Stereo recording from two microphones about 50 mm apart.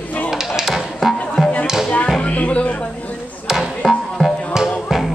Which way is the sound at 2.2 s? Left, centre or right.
Left.